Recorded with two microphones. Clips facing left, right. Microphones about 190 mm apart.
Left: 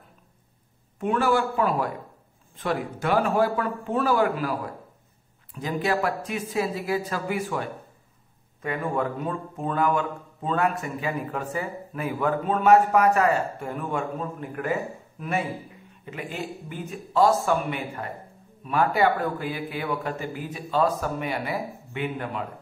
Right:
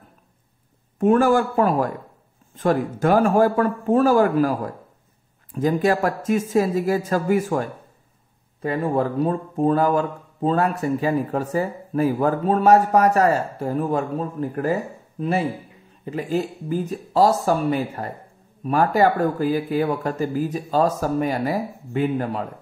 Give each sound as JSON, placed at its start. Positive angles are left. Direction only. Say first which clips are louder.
{"t": 0.9, "sound": "a man's voice", "louder": "right 7 dB", "side_deg": -45}
{"t": 8.5, "sound": "a man's voice", "louder": "right 5 dB", "side_deg": -35}